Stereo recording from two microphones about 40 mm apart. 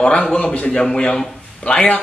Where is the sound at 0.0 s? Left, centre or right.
Left.